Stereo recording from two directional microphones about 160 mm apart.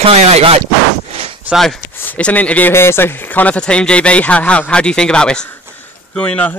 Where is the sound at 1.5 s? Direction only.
Centre (ahead or behind).